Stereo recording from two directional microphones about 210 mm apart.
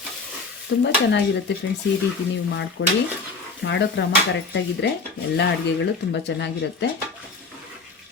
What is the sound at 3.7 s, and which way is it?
Speech, 60° left (ahead or behind).